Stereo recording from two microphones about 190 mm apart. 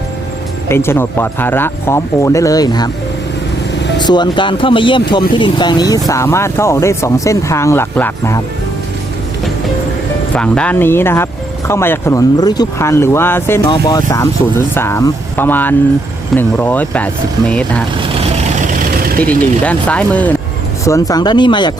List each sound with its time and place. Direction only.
0.7 s speech: 15° left (ahead or behind)
4.0 s speech: 25° left (ahead or behind)
10.3 s speech: 5° left (ahead or behind)
18.2 s vehicle: 45° right (ahead or behind)
19.6 s speech: 5° left (ahead or behind)
20.8 s speech: 15° left (ahead or behind)